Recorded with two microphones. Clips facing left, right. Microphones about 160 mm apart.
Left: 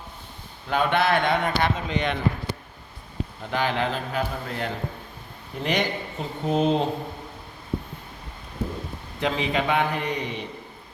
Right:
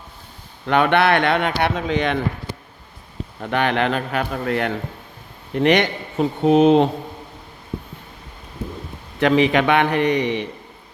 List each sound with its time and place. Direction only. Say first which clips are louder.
0.7 s speech: right 5 dB; 70° right (ahead or behind)
3.5 s speech: right 6 dB; 65° right (ahead or behind)
9.2 s speech: right 9 dB; 70° right (ahead or behind)